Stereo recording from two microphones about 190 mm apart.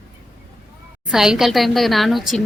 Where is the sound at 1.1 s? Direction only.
5° right (ahead or behind).